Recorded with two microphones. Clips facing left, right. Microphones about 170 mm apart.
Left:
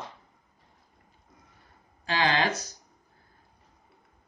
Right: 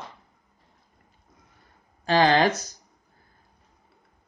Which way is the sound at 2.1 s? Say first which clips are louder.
Right 7 dB; 40° right (ahead or behind).